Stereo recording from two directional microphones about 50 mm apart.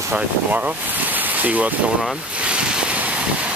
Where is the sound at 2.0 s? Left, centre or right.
Right.